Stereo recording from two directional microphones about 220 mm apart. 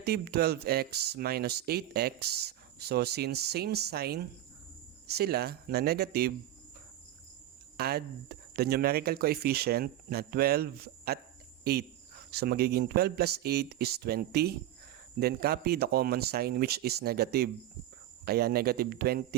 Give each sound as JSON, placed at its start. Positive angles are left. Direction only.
{"t": 0.0, "sound": "speech", "side_deg": -45}
{"t": 7.8, "sound": "speech", "side_deg": -45}
{"t": 11.6, "sound": "cricket", "side_deg": -45}
{"t": 12.3, "sound": "speech", "side_deg": -45}